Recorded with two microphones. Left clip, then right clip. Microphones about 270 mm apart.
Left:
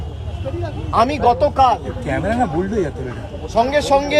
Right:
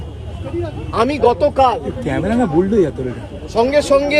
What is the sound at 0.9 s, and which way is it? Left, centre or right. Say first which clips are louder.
Speech: even; centre.